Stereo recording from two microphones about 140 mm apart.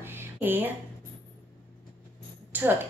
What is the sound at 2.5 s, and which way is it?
Speech, 10° right (ahead or behind).